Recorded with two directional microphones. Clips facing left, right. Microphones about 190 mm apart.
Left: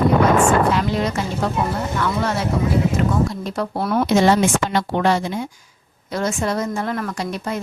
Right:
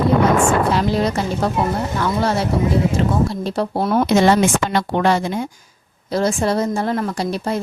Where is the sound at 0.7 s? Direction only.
35° right (ahead or behind).